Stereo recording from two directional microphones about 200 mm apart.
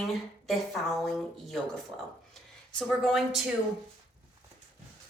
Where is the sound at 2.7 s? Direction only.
5° left (ahead or behind).